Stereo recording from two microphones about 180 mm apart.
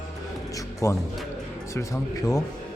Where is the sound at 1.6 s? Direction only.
15° left (ahead or behind).